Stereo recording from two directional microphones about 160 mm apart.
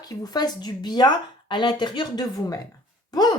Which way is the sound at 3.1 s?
25° left (ahead or behind).